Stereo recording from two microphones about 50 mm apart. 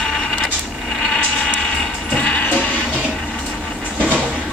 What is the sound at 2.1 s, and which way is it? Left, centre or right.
Music, left.